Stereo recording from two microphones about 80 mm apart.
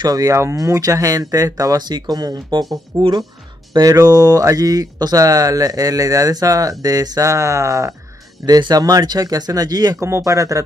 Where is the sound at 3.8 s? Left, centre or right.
Right.